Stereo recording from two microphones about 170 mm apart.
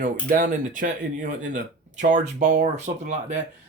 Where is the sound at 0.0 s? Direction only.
50° right (ahead or behind).